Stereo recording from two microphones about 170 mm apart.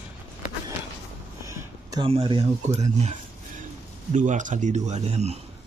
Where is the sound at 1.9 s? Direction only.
30° right (ahead or behind).